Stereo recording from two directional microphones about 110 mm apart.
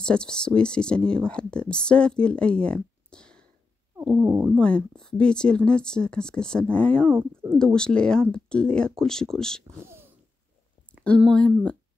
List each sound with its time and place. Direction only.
0.0 s speech: 5° left (ahead or behind)
4.1 s speech: 20° right (ahead or behind)
4.6 s speech: 10° left (ahead or behind)
9.8 s a sound: 20° right (ahead or behind)
11.2 s speech: 10° left (ahead or behind)